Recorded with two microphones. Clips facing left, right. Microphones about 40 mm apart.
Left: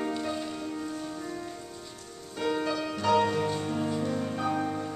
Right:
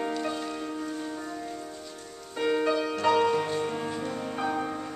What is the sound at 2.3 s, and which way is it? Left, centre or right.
Music, right.